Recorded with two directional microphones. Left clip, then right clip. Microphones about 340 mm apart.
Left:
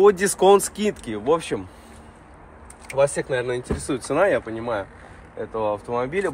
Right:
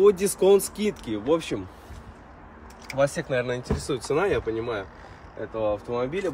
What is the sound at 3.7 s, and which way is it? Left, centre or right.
Speech, centre.